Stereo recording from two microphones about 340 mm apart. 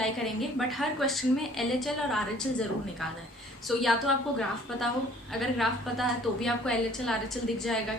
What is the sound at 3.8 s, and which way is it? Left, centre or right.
A woman's voice, centre.